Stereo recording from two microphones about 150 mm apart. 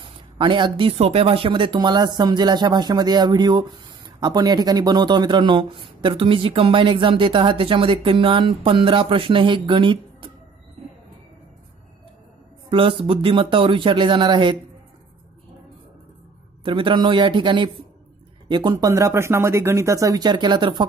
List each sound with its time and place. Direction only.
0.0 s speech: 35° right (ahead or behind)
12.6 s speech: 35° right (ahead or behind)
16.6 s speech: 35° right (ahead or behind)